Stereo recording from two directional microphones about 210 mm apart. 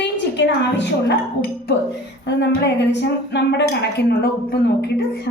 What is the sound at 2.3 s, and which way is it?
Music, 55° left (ahead or behind).